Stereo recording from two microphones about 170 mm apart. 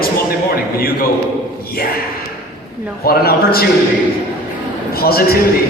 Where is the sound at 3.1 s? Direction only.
65° left (ahead or behind).